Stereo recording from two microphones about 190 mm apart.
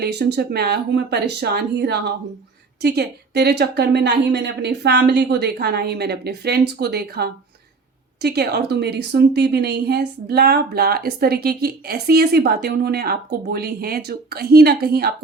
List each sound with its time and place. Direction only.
0.0 s a woman's voice: 60° right (ahead or behind)